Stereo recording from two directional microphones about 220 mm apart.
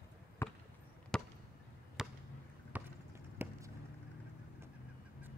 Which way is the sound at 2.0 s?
Centre (ahead or behind).